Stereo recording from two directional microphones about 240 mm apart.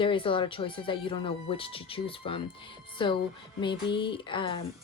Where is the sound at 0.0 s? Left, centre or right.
Left.